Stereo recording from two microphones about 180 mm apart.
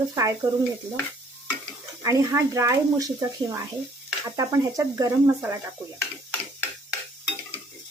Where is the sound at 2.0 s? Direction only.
20° right (ahead or behind).